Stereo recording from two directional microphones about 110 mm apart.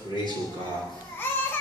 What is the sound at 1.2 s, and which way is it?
Babbling, 20° left (ahead or behind).